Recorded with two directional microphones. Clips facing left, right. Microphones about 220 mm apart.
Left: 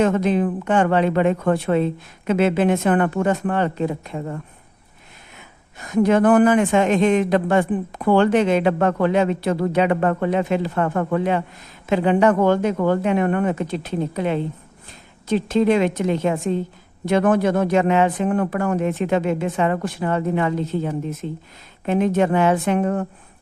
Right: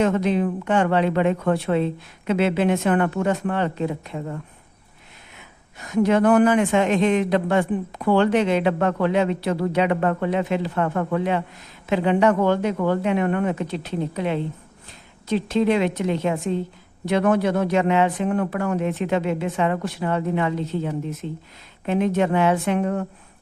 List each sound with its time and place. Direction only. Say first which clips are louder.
0.0 s a man's voice: left 2 dB; 50° left (ahead or behind)
5.8 s a man's voice: left 2 dB; 50° left (ahead or behind)